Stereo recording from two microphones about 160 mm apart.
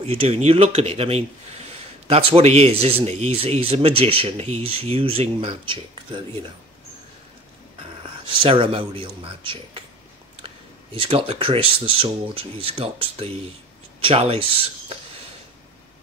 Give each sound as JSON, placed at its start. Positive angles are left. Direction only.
{"t": 0.0, "sound": "a man's voice", "side_deg": -35}
{"t": 8.0, "sound": "a man's voice", "side_deg": -35}